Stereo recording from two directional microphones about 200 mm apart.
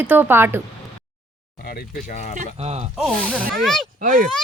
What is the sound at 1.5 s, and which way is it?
Speech, 50° left (ahead or behind).